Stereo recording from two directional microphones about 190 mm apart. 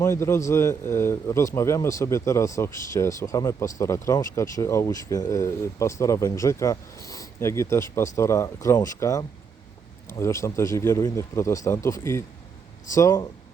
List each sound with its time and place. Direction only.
0.0 s a man's voice: 15° left (ahead or behind)